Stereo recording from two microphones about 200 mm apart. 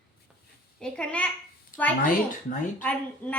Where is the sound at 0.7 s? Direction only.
5° left (ahead or behind).